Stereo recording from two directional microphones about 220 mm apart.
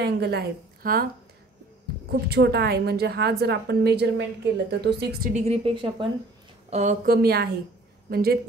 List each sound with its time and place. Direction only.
0.0 s a woman's voice: 50° right (ahead or behind)
2.0 s a woman's voice: 50° right (ahead or behind)
5.3 s a woman's voice: 30° right (ahead or behind)
6.7 s a woman's voice: 35° right (ahead or behind)